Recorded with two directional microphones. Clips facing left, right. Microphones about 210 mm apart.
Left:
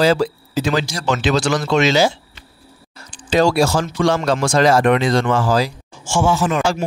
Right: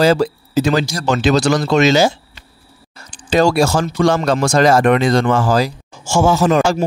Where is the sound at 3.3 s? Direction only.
45° right (ahead or behind).